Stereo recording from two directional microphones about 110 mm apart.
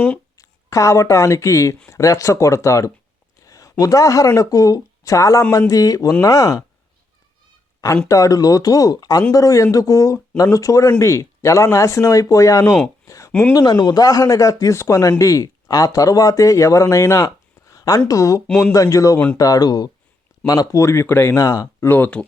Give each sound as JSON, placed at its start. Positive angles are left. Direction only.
{"t": 0.3, "sound": "speech", "side_deg": 30}
{"t": 8.0, "sound": "speech", "side_deg": 30}
{"t": 13.1, "sound": "a sound", "side_deg": 30}
{"t": 13.5, "sound": "speech", "side_deg": 35}
{"t": 21.8, "sound": "speech", "side_deg": 20}